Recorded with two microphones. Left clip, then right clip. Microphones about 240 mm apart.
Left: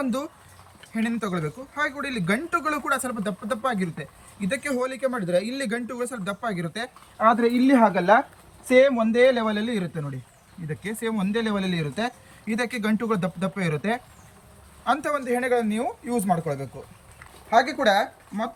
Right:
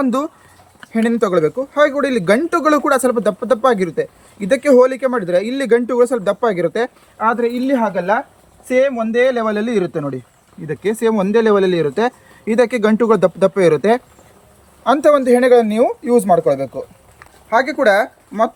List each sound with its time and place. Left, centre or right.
0.0 s speech: centre
17.5 s speech: centre